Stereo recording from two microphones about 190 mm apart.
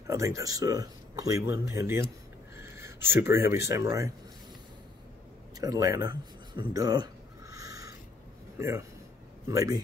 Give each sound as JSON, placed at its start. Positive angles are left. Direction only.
{"t": 0.0, "sound": "speech", "side_deg": -15}
{"t": 5.6, "sound": "a sound", "side_deg": -15}
{"t": 8.5, "sound": "speech", "side_deg": -15}